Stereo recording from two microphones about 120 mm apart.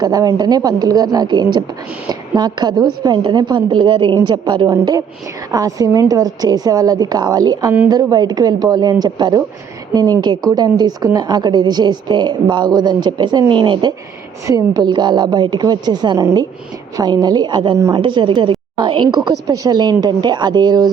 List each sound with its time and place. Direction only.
0.0 s a woman's voice: 30° right (ahead or behind)
14.4 s a woman's voice: 30° right (ahead or behind)
17.7 s a woman's voice: 25° right (ahead or behind)
18.0 s a woman's voice: 40° right (ahead or behind)